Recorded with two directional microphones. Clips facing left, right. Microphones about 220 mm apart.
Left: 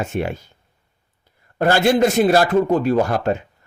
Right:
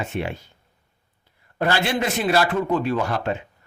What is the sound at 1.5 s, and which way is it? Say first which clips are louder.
A man's voice: left 7 dB; 45° left (ahead or behind).